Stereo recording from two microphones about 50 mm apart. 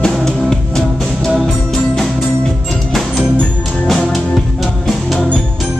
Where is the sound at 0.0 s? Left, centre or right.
Centre.